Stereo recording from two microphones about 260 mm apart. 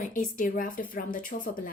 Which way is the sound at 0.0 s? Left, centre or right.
Left.